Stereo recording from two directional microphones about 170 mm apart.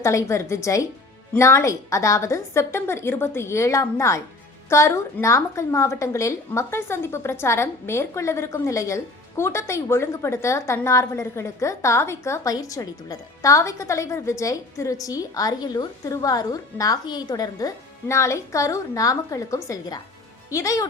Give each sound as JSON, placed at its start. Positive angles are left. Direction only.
{"t": 0.0, "sound": "a woman's voice", "side_deg": 15}